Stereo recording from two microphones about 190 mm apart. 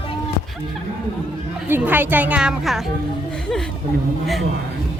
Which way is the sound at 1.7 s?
10° right (ahead or behind).